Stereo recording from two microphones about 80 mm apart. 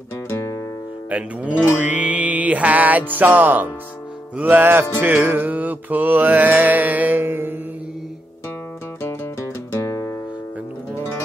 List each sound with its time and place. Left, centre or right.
0.3 s music: left
1.1 s speech: centre
1.8 s music: centre
3.2 s speech: right
5.0 s mantra: right
9.8 s music: left